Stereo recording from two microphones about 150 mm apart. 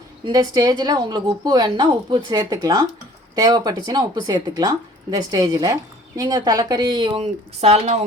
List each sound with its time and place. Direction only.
0.3 s a woman's voice: 25° right (ahead or behind); by 8.0 s 45° right (ahead or behind)